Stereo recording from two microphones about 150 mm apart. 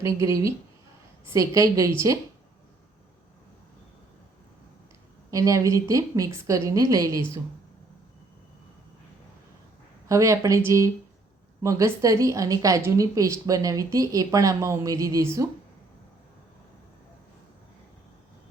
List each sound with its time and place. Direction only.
0.0 s a woman's voice: 20° right (ahead or behind)
5.3 s a woman's voice: 20° right (ahead or behind)
10.1 s a woman's voice: 20° right (ahead or behind)